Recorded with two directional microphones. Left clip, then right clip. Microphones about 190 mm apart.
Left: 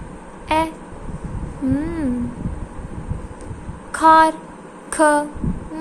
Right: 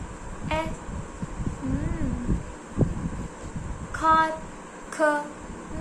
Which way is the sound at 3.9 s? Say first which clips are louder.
Left 9 dB; 55° left (ahead or behind).